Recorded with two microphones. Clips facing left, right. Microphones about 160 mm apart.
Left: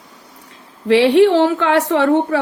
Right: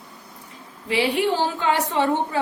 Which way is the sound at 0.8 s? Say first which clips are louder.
Left 11 dB; 80° left.